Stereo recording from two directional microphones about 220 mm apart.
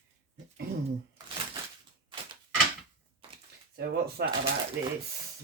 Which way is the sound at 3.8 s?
45° right (ahead or behind).